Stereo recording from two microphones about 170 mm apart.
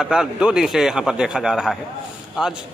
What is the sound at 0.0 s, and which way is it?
A man's voice, 5° right (ahead or behind).